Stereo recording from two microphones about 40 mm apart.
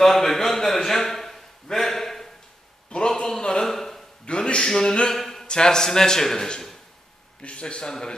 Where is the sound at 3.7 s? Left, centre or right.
Centre.